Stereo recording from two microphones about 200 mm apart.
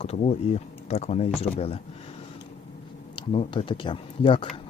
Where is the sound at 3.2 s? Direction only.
25° left (ahead or behind).